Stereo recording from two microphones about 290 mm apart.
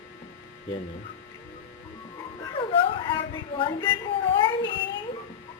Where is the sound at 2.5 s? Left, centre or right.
Centre.